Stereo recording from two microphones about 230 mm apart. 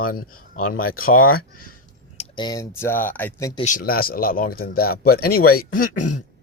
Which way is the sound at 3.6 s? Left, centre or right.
Left.